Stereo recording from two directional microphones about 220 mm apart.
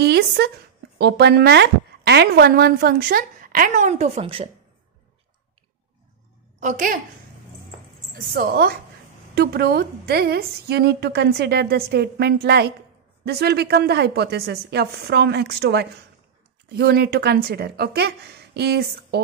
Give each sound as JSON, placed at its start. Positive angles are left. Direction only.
{"t": 0.0, "sound": "a woman's voice", "side_deg": -50}
{"t": 6.6, "sound": "a woman's voice", "side_deg": -35}
{"t": 8.1, "sound": "a woman's voice", "side_deg": -45}